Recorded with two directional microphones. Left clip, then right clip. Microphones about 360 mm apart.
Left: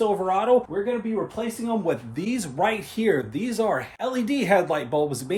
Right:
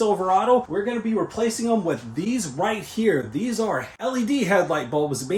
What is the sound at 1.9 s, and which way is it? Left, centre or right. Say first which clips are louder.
Speech: even; centre.